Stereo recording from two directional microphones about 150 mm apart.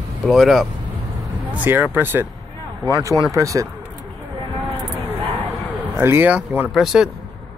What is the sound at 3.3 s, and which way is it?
Speech, 20° right (ahead or behind).